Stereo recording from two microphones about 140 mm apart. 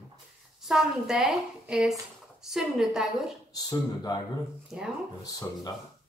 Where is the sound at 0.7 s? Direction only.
5° right (ahead or behind).